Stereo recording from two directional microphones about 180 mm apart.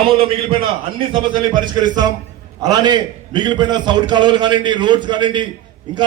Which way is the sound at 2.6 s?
25° right (ahead or behind).